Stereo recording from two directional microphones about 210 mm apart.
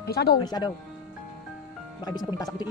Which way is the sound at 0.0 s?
50° left (ahead or behind).